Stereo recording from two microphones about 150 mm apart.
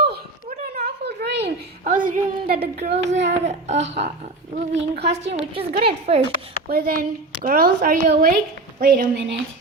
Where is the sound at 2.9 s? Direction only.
50° right (ahead or behind).